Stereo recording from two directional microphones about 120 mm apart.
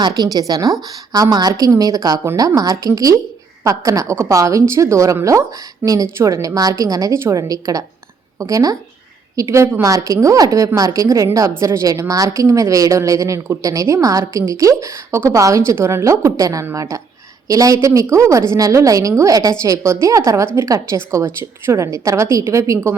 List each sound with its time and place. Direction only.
0.0 s a woman's voice: 30° right (ahead or behind)